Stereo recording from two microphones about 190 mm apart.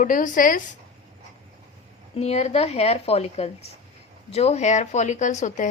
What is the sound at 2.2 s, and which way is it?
A woman's voice, 35° left (ahead or behind).